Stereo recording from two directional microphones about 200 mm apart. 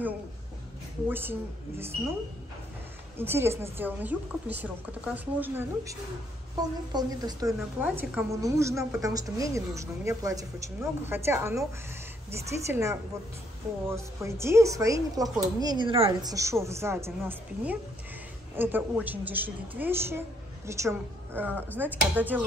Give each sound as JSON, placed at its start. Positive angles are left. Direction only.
{"t": 1.0, "sound": "speech", "side_deg": -10}
{"t": 3.2, "sound": "speech", "side_deg": -10}
{"t": 6.9, "sound": "a woman's voice", "side_deg": -20}